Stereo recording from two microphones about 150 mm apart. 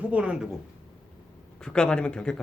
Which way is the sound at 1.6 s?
5° left (ahead or behind).